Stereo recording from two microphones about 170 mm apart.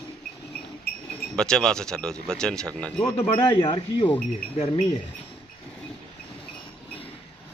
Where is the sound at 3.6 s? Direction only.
30° left (ahead or behind).